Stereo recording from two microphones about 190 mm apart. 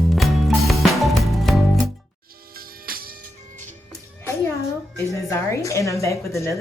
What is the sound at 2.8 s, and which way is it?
Music, 50° right (ahead or behind).